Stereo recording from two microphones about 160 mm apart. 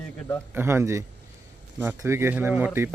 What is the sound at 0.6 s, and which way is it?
Speech, 15° right (ahead or behind).